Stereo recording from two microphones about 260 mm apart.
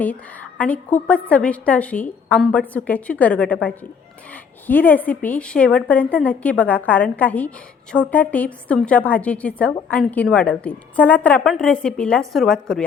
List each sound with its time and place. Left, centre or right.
0.6 s a woman's voice: centre